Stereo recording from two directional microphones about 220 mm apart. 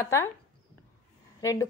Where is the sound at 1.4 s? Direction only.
15° left (ahead or behind).